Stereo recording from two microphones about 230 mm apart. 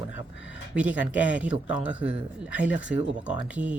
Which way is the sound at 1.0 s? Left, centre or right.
Centre.